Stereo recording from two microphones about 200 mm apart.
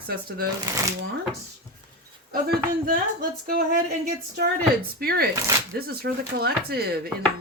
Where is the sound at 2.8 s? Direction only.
45° right (ahead or behind).